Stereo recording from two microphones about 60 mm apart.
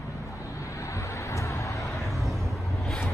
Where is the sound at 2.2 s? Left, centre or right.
Centre.